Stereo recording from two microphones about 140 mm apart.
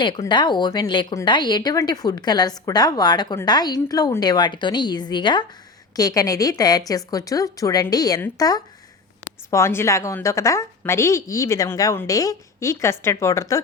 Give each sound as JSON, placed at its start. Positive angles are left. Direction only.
{"t": 0.2, "sound": "a woman's voice", "side_deg": 30}